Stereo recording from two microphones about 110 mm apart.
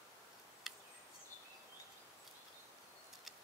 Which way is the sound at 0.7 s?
Centre (ahead or behind).